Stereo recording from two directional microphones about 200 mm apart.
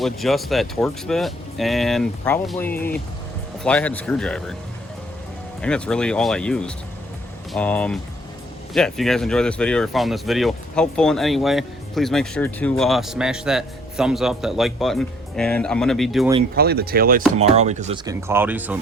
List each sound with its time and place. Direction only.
0.0 s speech: centre (ahead or behind)
5.6 s speech: 5° left (ahead or behind)
16.6 s speech: 50° right (ahead or behind)
17.3 s speech: 35° right (ahead or behind)
17.9 s speech: 15° right (ahead or behind)